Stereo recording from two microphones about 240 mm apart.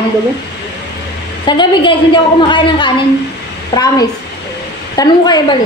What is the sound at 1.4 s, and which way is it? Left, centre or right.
A woman's voice, centre.